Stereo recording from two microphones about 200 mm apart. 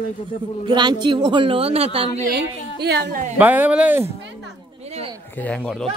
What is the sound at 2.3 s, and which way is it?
Speech, 55° right (ahead or behind).